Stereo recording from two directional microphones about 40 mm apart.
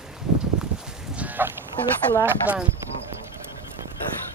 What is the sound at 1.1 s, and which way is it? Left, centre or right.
Goose, right.